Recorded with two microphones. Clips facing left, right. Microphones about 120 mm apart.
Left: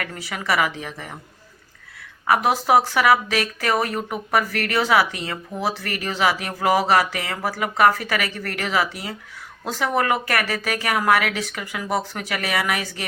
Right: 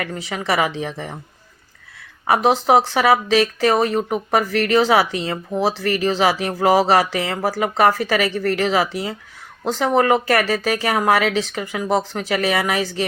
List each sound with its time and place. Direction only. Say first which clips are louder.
0.0 s speech: right 4 dB; 25° right (ahead or behind)
2.2 s speech: right 3 dB; 25° right (ahead or behind)